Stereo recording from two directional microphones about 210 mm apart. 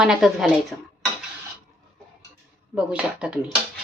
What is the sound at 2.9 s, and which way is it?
Speech, 5° right (ahead or behind).